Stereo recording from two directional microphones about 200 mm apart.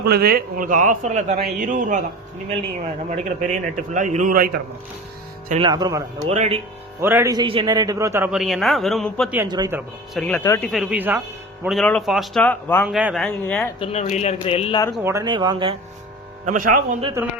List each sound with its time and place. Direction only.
0.0 s a man's voice: 50° right (ahead or behind)
3.1 s a man's voice: 40° right (ahead or behind)
5.6 s speech: 20° right (ahead or behind)
6.2 s a man's voice: 30° right (ahead or behind)
7.0 s a man's voice: 10° right (ahead or behind)
9.5 s speech: 20° right (ahead or behind)
10.2 s a man's voice: 5° left (ahead or behind)
10.7 s a man's voice: 5° right (ahead or behind)
12.9 s a man's voice: 5° right (ahead or behind)
13.7 s speech: 30° left (ahead or behind)
15.0 s speech: 15° right (ahead or behind)
16.5 s speech: 45° right (ahead or behind)